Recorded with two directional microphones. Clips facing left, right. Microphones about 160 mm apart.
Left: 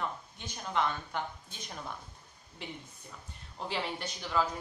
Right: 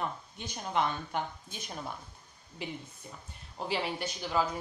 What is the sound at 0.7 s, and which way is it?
Speech, 20° right (ahead or behind).